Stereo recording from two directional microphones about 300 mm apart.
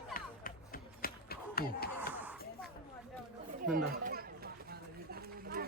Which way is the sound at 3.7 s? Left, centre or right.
Right.